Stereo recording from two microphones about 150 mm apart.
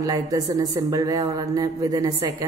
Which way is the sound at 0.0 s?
25° right (ahead or behind).